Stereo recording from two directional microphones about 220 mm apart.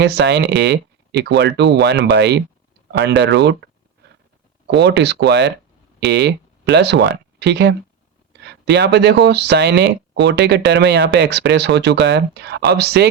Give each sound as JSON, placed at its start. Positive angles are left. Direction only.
{"t": 0.0, "sound": "speech", "side_deg": -50}
{"t": 4.6, "sound": "speech", "side_deg": -50}